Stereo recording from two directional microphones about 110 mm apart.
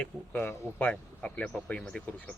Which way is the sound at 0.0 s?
15° left (ahead or behind).